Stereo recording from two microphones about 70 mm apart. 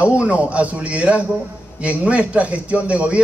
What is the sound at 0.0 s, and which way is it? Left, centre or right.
A man's voice, centre.